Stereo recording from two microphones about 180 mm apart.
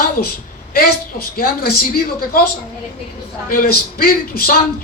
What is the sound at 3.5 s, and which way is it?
A woman's voice, 55° left (ahead or behind).